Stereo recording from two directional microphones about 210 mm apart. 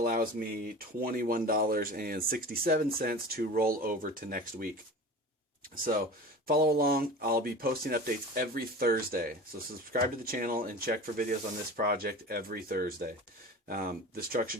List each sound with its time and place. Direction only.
0.0 s speech: 45° right (ahead or behind)
5.7 s speech: 45° right (ahead or behind)